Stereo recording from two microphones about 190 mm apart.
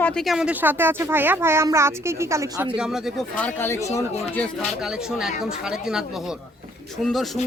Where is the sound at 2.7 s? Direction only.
5° right (ahead or behind); by 3.8 s 15° left (ahead or behind).